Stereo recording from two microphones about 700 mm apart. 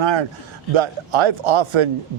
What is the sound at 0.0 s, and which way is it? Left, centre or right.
A man's voice, right.